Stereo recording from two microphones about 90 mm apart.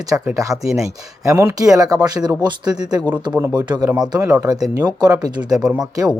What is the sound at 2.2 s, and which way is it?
Speech, 50° right (ahead or behind).